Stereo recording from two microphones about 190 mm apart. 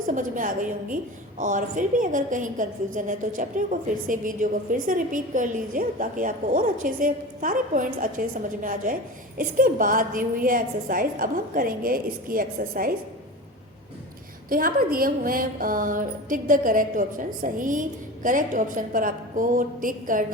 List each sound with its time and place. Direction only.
0.0 s a woman's voice: 45° right (ahead or behind)
14.5 s a woman's voice: 50° right (ahead or behind)